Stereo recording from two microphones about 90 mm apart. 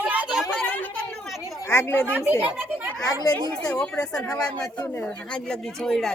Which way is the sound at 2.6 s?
20° right (ahead or behind).